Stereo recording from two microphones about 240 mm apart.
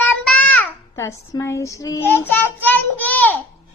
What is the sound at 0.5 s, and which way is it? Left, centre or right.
Child singing, centre.